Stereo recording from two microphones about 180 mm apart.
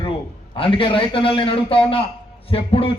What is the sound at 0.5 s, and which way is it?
Speech, 30° left (ahead or behind).